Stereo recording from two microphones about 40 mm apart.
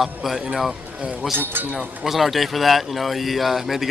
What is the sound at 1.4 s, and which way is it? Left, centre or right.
Speech, right.